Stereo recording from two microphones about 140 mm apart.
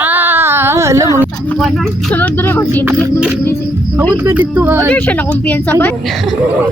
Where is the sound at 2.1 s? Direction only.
10° left (ahead or behind).